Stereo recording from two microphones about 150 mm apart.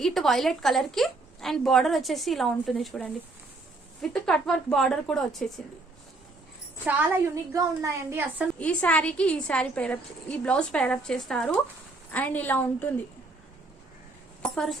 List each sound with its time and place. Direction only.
0.0 s a woman's voice: centre (ahead or behind)
6.8 s a woman's voice: 10° right (ahead or behind)
8.5 s a woman's voice: 10° left (ahead or behind)
14.4 s a woman's voice: 5° left (ahead or behind)